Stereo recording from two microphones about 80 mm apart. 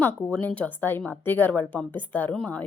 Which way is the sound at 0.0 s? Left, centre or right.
Centre.